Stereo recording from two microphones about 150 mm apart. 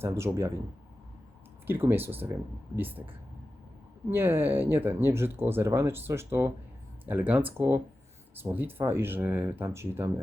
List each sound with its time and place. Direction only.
0.0 s speech: 20° right (ahead or behind)
1.6 s speech: 15° right (ahead or behind)